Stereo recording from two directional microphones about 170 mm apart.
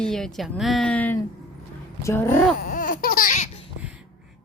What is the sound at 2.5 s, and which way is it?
Laughter, 55° left (ahead or behind).